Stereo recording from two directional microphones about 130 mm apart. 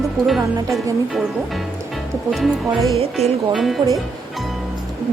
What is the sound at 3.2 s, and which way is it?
Speech, 55° right (ahead or behind).